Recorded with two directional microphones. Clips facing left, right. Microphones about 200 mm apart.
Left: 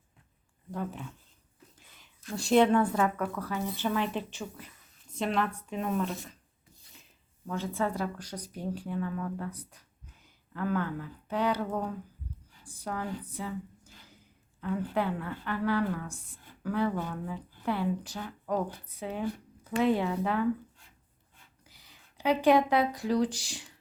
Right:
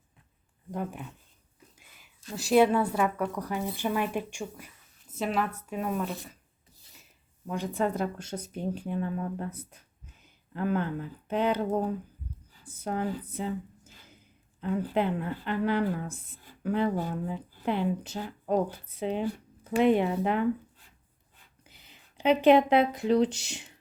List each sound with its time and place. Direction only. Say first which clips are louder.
0.7 s speech: right 1 dB; 15° right (ahead or behind)
7.4 s speech: right 2 dB; 15° right (ahead or behind)
12.6 s a sound: right 5 dB; 20° right (ahead or behind)
14.6 s speech: right 3 dB; 20° right (ahead or behind)
21.6 s speech: right 5 dB; 20° right (ahead or behind)